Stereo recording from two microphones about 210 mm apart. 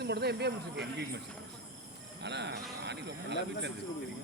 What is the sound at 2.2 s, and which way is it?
Speech, 55° right (ahead or behind).